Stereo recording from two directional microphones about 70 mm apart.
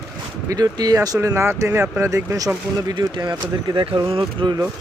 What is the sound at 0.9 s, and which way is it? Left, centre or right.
Speech, right.